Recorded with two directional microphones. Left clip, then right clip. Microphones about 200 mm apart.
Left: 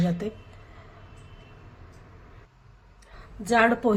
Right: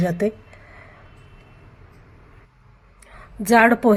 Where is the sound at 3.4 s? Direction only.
35° right (ahead or behind).